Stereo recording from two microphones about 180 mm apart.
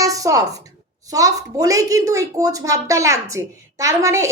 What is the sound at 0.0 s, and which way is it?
A woman's voice, 20° right (ahead or behind).